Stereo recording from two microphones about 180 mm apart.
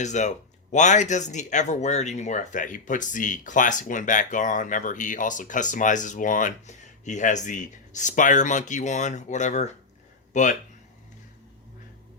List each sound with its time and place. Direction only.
0.0 s speech: 40° left (ahead or behind)